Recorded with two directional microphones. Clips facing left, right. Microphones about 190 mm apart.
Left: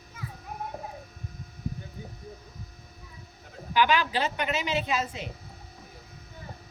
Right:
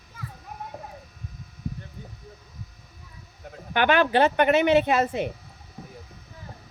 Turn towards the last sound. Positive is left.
turn(degrees=-60)  # may be behind; listen again after turning